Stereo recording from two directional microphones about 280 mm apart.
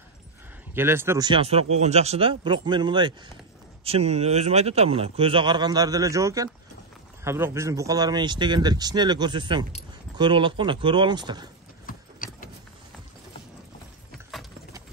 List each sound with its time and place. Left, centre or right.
0.7 s a man's voice: centre
11.8 s gears: left
14.3 s horse: centre